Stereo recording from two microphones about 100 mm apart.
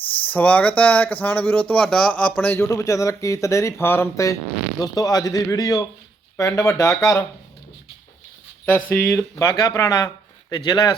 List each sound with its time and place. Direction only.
0.3 s speech: 15° left (ahead or behind)
2.6 s speech: 35° left (ahead or behind)
8.6 s speech: 20° left (ahead or behind)
10.5 s speech: 40° left (ahead or behind)